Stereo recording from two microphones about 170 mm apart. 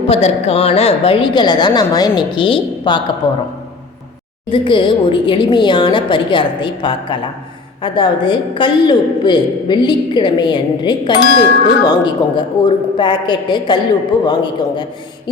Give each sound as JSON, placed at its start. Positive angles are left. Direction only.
{"t": 0.1, "sound": "a woman's voice", "side_deg": 40}
{"t": 4.5, "sound": "a woman's voice", "side_deg": 30}